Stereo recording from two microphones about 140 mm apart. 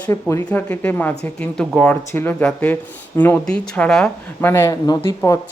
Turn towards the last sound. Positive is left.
turn(degrees=20)  # may be behind; listen again after turning